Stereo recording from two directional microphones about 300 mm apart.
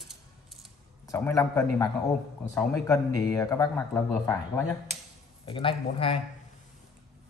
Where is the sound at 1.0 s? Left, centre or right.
Centre.